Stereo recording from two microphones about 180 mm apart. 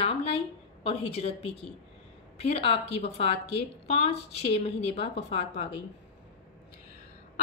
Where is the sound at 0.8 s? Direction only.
35° left (ahead or behind).